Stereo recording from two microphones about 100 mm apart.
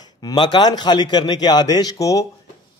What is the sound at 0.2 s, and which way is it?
A man's voice, 45° left (ahead or behind).